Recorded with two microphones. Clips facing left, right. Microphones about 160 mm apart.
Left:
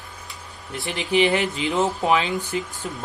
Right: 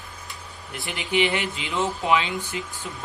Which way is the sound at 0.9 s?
35° left (ahead or behind).